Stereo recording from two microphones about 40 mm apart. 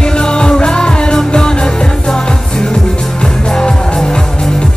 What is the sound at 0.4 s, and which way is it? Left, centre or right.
Music, left.